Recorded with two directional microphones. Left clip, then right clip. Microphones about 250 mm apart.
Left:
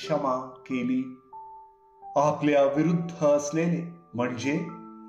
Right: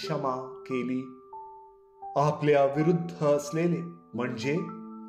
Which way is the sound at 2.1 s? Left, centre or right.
Right.